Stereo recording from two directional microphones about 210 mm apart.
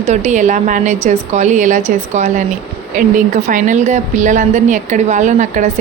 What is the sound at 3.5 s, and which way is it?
Speech, 35° right (ahead or behind).